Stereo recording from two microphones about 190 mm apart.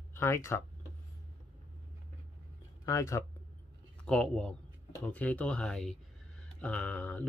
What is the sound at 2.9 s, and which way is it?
Speech, 15° left (ahead or behind).